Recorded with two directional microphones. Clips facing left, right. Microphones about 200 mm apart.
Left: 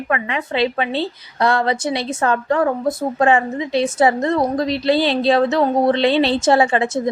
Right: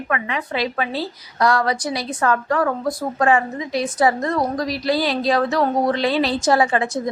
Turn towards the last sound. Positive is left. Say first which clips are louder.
# left 3 dB
turn(degrees=25)  # may be behind; listen again after turning